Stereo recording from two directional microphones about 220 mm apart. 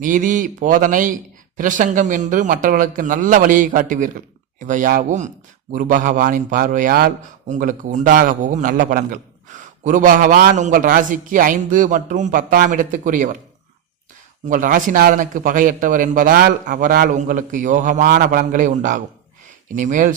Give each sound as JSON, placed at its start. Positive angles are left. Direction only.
{"t": 0.0, "sound": "speech", "side_deg": -35}
{"t": 14.4, "sound": "speech", "side_deg": -35}